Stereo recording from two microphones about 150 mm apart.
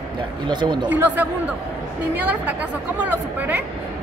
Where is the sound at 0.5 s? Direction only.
30° right (ahead or behind).